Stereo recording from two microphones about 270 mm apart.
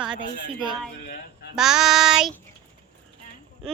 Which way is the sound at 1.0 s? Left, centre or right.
Left.